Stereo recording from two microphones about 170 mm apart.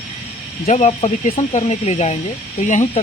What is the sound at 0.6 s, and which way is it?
Speech, 45° left (ahead or behind).